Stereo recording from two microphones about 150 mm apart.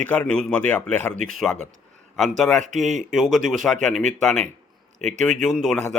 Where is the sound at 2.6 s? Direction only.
55° right (ahead or behind).